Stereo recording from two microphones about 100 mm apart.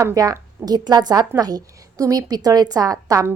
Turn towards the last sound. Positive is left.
turn(degrees=-35)  # may be behind; listen again after turning